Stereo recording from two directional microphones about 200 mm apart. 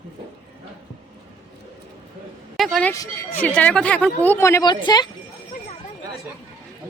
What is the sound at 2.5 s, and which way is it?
Speech, centre (ahead or behind).